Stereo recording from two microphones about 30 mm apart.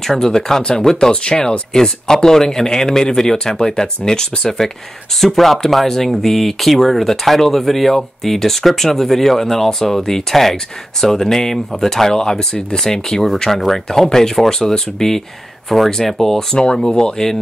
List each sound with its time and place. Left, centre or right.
0.0 s speech: centre
5.2 s speech: centre
12.2 s speech: left
14.3 s speech: centre